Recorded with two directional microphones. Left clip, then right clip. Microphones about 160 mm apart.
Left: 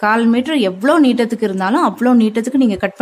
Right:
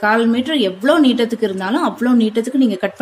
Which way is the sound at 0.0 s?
45° left (ahead or behind).